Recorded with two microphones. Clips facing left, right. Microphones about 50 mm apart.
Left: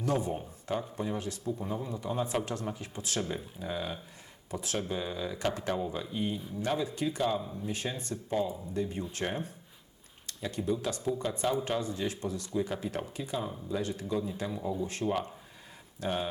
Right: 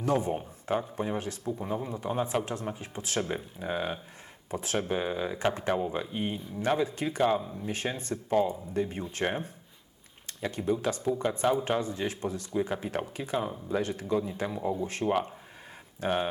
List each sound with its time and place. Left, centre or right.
0.0 s a man's voice: right